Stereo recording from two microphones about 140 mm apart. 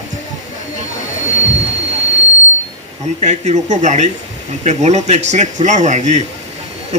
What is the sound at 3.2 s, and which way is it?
A man's voice, 55° right (ahead or behind).